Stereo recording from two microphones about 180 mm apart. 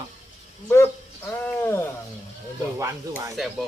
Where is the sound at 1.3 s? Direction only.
15° left (ahead or behind).